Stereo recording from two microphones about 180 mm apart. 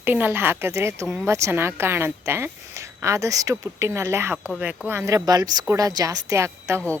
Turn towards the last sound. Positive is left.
turn(degrees=-15)  # may be behind; listen again after turning